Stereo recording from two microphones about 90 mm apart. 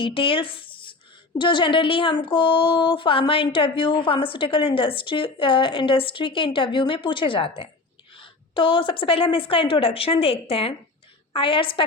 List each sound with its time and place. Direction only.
0.0 s a woman's voice: 90° left
11.3 s a woman's voice: 75° left (ahead or behind)